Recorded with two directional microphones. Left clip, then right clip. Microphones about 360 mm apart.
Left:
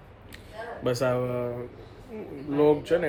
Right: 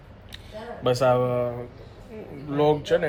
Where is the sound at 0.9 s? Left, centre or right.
Centre.